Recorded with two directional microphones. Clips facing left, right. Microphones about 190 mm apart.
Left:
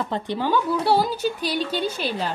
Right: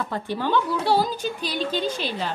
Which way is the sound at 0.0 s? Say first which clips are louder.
Left 2 dB; 20° left (ahead or behind).